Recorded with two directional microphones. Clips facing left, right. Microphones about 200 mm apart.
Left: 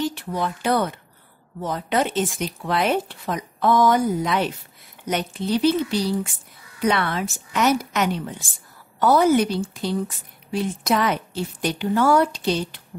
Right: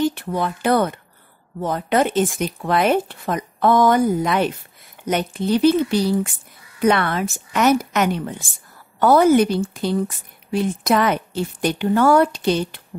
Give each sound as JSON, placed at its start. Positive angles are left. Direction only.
{"t": 0.0, "sound": "a woman's voice", "side_deg": -55}